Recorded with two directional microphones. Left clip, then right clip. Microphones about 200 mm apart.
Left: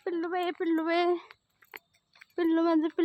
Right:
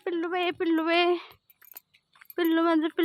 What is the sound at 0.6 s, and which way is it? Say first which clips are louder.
Speech: right 4 dB; 15° right (ahead or behind).